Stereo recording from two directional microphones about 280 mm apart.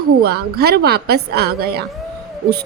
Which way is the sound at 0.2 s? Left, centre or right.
Right.